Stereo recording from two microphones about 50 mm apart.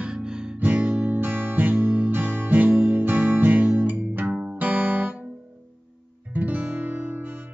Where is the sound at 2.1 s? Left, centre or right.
Right.